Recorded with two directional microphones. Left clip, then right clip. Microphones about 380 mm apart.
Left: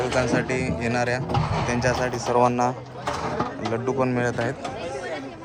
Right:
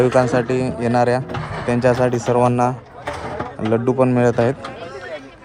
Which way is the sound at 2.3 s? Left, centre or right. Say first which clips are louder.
Right 2 dB; right.